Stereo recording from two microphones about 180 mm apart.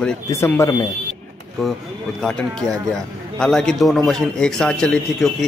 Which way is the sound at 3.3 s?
5° left (ahead or behind).